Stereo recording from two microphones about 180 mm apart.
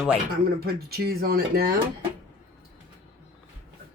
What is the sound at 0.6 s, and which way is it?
Speech, 60° right (ahead or behind).